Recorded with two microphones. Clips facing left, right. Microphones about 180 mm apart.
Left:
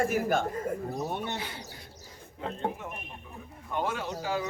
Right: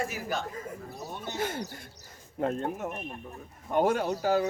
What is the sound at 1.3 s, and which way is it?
Speech, 45° right (ahead or behind).